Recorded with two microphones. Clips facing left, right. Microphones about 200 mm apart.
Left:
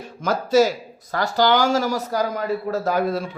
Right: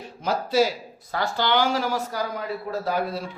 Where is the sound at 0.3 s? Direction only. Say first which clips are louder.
Left 4 dB; 45° left (ahead or behind).